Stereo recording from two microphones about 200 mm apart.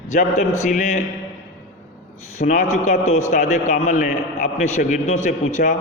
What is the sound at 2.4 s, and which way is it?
A man's voice, 40° left (ahead or behind).